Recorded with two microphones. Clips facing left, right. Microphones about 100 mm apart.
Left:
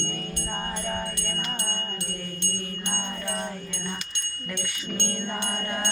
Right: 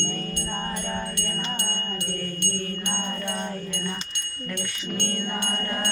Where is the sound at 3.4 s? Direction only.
15° left (ahead or behind).